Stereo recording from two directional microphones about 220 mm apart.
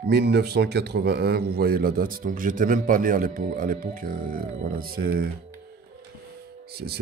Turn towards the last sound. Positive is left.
turn(degrees=-45)  # may be behind; listen again after turning